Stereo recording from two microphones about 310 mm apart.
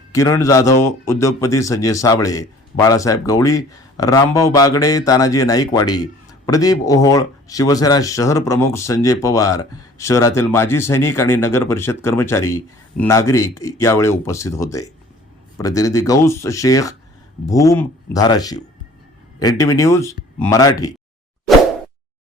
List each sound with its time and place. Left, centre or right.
0.1 s a man's voice: centre